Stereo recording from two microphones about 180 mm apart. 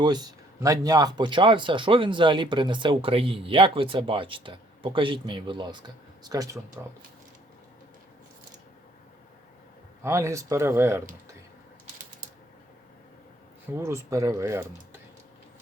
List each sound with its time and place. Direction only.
0.0 s speech: 20° right (ahead or behind)
10.0 s speech: 15° right (ahead or behind)
13.7 s speech: 15° right (ahead or behind)